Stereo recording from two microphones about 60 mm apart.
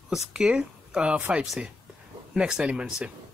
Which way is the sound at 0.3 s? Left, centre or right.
Centre.